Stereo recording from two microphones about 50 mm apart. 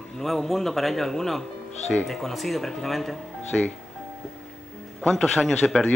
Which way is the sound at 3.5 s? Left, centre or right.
Left.